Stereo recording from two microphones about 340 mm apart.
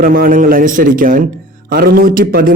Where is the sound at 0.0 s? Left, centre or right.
Right.